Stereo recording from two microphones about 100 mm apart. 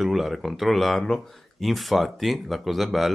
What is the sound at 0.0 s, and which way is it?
Speech, centre (ahead or behind).